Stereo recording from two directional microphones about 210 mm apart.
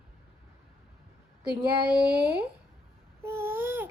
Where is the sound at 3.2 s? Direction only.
10° right (ahead or behind).